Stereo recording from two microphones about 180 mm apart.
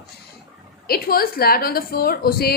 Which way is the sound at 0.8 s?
55° left (ahead or behind).